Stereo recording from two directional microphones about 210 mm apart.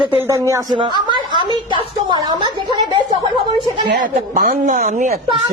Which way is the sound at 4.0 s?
45° right (ahead or behind).